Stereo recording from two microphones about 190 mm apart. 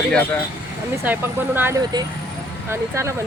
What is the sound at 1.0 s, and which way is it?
Speech, 10° right (ahead or behind).